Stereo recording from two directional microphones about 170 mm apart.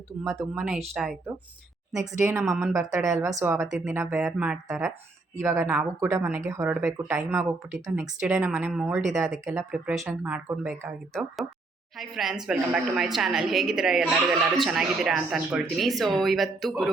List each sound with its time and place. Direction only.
0.3 s speech: centre (ahead or behind)
2.0 s speech: 15° right (ahead or behind)
2.4 s speech: 5° right (ahead or behind)
2.9 s speech: 20° right (ahead or behind)
11.1 s speech: centre (ahead or behind)